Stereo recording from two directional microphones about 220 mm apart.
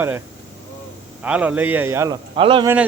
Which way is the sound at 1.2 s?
5° right (ahead or behind).